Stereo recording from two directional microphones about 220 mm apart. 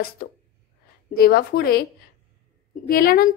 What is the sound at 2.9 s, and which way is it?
Speech, 40° left (ahead or behind).